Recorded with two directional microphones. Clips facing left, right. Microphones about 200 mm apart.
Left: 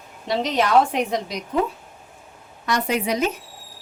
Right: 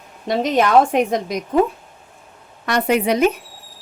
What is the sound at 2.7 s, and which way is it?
Speech, 60° right (ahead or behind).